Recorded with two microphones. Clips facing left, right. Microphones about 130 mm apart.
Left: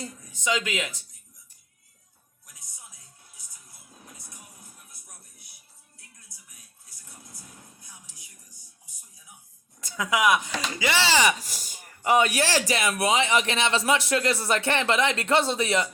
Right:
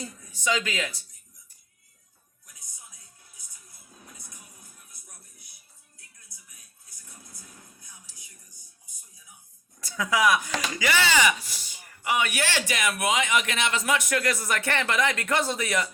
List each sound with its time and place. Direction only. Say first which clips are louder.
0.3 s speech: even; 20° left (ahead or behind)
9.8 s speech: even; 20° left (ahead or behind)